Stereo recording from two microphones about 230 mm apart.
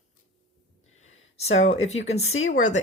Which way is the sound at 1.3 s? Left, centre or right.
Left.